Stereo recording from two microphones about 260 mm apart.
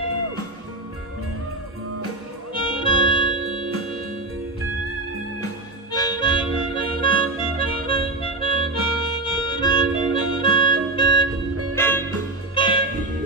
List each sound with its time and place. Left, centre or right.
2.5 s music: centre
5.9 s harmonica: centre
11.7 s music: centre
12.5 s music: centre